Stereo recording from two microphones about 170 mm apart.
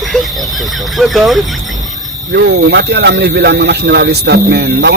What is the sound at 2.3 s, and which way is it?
Speech, 75° right (ahead or behind).